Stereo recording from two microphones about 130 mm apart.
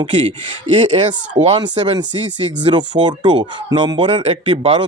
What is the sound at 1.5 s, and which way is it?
Speech, 35° right (ahead or behind).